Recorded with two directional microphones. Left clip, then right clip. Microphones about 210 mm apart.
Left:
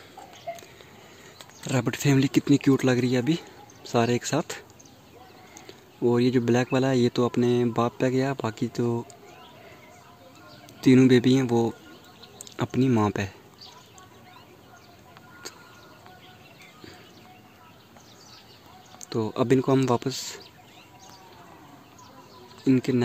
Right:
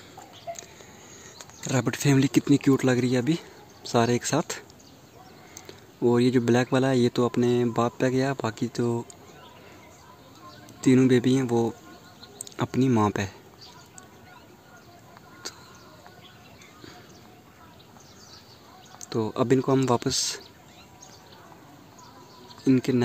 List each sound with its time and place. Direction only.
0.5 s a sound: 40° left (ahead or behind)
1.4 s speech: 5° right (ahead or behind)
10.8 s speech: 10° left (ahead or behind)
15.4 s a sound: 5° right (ahead or behind)
19.0 s speech: centre (ahead or behind)
20.0 s speech: 10° right (ahead or behind)
22.7 s speech: centre (ahead or behind)